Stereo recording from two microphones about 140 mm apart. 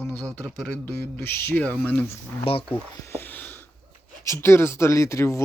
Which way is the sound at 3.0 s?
15° left (ahead or behind).